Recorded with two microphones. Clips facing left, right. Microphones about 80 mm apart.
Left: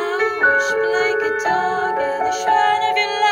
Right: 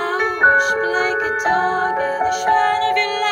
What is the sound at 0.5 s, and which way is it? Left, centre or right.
Music, right.